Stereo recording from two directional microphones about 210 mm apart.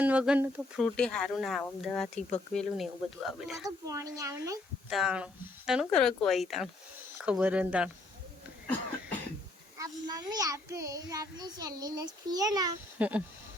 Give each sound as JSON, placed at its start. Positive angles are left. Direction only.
{"t": 0.0, "sound": "a child's voice", "side_deg": -5}
{"t": 3.8, "sound": "a child's voice", "side_deg": -15}
{"t": 4.9, "sound": "speech", "side_deg": 0}
{"t": 9.7, "sound": "a child's voice", "side_deg": -15}
{"t": 13.0, "sound": "a child's voice", "side_deg": -5}